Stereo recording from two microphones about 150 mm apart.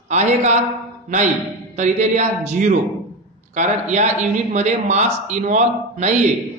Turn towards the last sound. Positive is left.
turn(degrees=-50)  # may be behind; listen again after turning